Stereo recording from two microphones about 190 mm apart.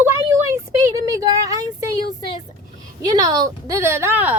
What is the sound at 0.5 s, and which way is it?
Speech, 20° right (ahead or behind).